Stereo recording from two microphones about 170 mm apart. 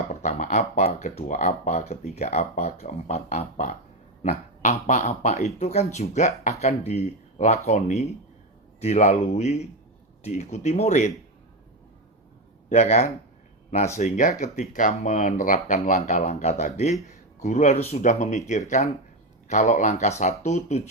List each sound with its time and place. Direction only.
0.1 s speech: 45° left (ahead or behind)
8.8 s speech: 40° left (ahead or behind)
12.6 s a man's voice: 40° left (ahead or behind)